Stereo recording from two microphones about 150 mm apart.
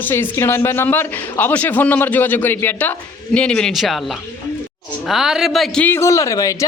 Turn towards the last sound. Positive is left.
turn(degrees=20)  # may be behind; listen again after turning